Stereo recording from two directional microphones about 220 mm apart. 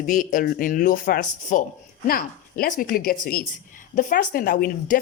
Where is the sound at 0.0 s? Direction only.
35° left (ahead or behind).